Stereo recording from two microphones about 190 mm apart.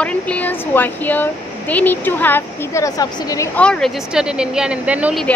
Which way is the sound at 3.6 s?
5° left (ahead or behind).